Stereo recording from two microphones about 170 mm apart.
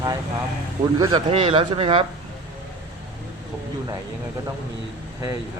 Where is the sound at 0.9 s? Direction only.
25° right (ahead or behind).